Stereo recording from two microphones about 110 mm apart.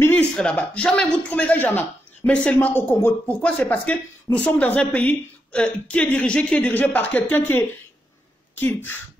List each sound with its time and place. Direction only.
0.2 s speech: 10° left (ahead or behind)